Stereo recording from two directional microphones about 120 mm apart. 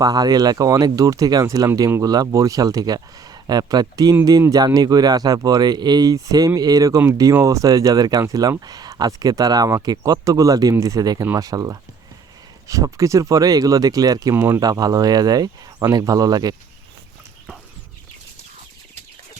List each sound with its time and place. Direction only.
0.0 s speech: 35° right (ahead or behind)
14.6 s speech: 30° right (ahead or behind)